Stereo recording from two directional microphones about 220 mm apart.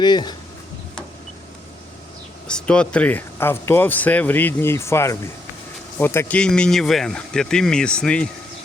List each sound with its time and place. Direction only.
0.0 s speech: 20° left (ahead or behind)
2.5 s speech: 5° left (ahead or behind)